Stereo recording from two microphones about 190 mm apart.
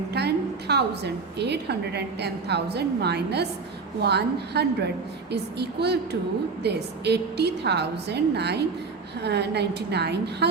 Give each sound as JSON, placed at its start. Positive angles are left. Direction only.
{"t": 0.1, "sound": "a woman's voice", "side_deg": -60}